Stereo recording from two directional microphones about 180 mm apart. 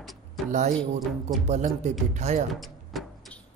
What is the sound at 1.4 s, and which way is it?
Speech, 40° right (ahead or behind).